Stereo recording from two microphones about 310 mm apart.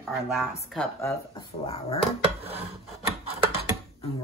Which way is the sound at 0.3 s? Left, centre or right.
Centre.